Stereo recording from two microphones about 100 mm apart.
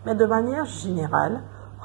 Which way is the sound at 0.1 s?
20° right (ahead or behind).